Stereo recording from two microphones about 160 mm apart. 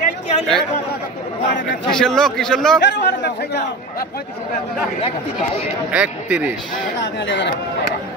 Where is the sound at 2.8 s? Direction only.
90° left.